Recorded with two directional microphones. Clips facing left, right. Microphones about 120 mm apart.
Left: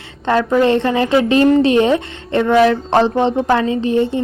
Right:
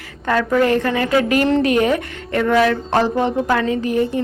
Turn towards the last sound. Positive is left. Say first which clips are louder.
# left 3 dB
turn(degrees=25)  # may be behind; listen again after turning